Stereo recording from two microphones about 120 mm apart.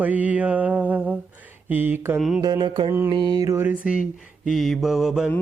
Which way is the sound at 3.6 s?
10° right (ahead or behind).